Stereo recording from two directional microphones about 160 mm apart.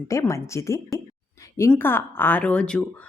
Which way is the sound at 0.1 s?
20° left (ahead or behind).